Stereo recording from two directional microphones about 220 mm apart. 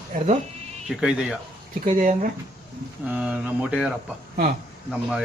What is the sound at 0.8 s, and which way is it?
Speech, centre (ahead or behind).